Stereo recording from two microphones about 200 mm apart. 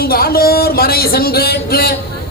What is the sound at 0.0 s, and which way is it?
Speech, 50° left (ahead or behind).